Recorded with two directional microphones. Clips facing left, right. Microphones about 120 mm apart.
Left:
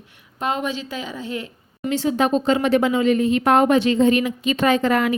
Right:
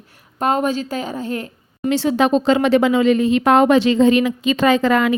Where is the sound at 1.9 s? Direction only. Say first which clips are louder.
Right 3 dB; 80° right.